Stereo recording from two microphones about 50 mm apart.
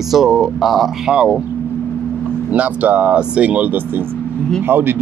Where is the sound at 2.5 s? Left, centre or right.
Right.